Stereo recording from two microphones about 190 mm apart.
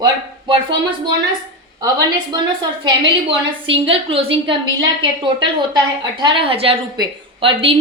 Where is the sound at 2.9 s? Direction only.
25° right (ahead or behind).